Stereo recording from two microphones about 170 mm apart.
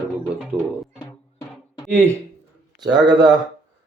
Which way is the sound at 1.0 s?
25° left (ahead or behind).